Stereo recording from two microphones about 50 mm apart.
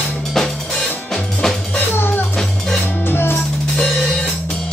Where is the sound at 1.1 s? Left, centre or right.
Centre.